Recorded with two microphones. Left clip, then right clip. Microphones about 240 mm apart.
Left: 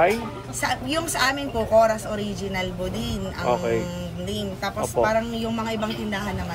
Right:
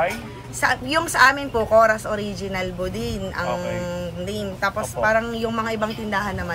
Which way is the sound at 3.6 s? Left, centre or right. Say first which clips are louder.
Left 3 dB; centre.